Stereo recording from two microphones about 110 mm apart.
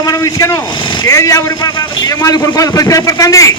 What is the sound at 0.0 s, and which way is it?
Vehicle, 30° left (ahead or behind).